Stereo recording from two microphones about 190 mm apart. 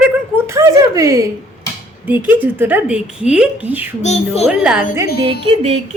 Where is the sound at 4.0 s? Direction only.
35° left (ahead or behind).